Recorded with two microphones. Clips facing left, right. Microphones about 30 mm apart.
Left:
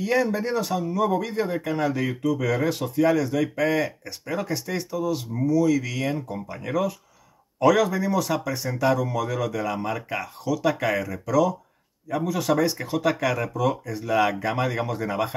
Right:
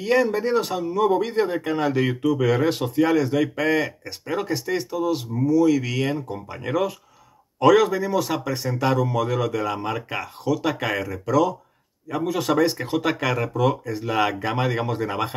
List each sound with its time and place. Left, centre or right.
0.0 s speech: right
5.5 s speech: right
8.1 s speech: right
8.5 s speech: right